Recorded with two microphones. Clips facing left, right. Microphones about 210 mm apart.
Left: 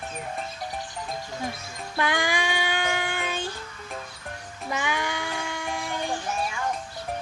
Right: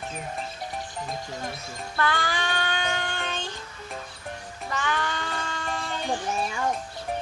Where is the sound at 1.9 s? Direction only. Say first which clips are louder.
Left 2 dB; 15° left (ahead or behind).